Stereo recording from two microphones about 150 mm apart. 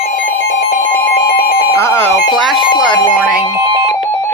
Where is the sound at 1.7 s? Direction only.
15° left (ahead or behind).